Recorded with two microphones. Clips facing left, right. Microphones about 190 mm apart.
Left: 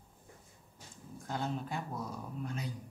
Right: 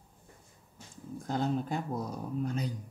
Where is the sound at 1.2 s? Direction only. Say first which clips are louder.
Right 6 dB; 40° right (ahead or behind).